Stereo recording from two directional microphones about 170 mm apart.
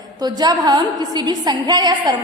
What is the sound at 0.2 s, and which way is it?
A woman's voice, 25° right (ahead or behind).